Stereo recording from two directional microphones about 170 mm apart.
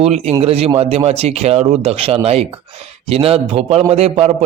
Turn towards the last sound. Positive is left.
turn(degrees=-35)  # may be behind; listen again after turning